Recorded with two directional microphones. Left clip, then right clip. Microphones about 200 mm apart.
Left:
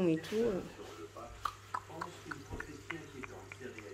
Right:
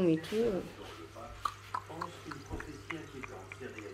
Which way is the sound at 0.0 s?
Centre (ahead or behind).